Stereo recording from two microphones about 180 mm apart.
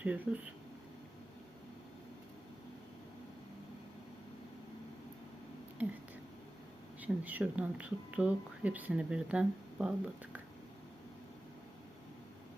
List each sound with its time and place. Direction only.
0.3 s speech: 5° right (ahead or behind)
5.8 s speech: 10° right (ahead or behind)
7.0 s speech: 10° right (ahead or behind)